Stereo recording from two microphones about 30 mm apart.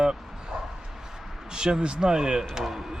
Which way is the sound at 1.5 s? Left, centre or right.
Right.